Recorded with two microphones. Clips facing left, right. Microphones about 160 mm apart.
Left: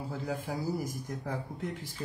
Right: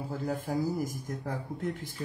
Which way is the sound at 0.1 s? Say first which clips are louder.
Right 4 dB; 50° right (ahead or behind).